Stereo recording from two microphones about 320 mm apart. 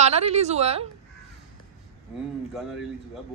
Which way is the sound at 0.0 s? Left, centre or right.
Centre.